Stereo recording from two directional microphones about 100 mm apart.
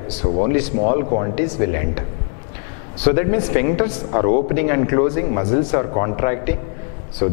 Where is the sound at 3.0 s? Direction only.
10° left (ahead or behind).